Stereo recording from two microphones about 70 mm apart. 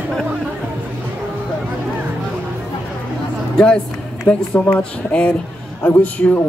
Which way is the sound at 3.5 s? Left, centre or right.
Centre.